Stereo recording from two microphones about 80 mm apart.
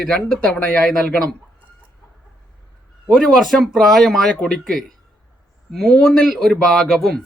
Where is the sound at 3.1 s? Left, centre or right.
Centre.